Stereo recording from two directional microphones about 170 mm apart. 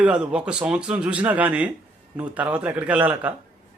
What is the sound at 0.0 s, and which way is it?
A man's voice, 5° right (ahead or behind).